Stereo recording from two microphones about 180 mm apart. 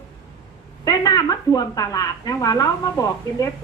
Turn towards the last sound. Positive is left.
turn(degrees=20)  # may be behind; listen again after turning